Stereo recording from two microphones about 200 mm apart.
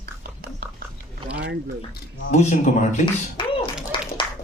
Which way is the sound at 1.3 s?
60° right (ahead or behind).